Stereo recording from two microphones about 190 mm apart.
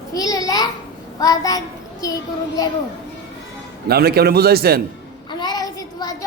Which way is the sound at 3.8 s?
55° right (ahead or behind).